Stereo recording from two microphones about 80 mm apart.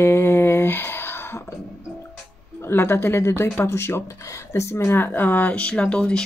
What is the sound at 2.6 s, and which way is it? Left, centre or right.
Speech, left.